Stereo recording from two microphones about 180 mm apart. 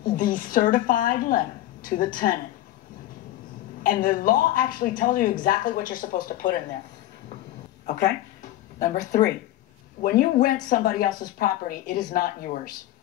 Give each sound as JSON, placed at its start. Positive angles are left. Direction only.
{"t": 0.1, "sound": "a woman's voice", "side_deg": 50}
{"t": 3.8, "sound": "a woman's voice", "side_deg": 50}
{"t": 8.7, "sound": "a woman's voice", "side_deg": 45}